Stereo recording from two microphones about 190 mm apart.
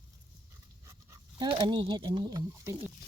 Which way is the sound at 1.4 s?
25° right (ahead or behind).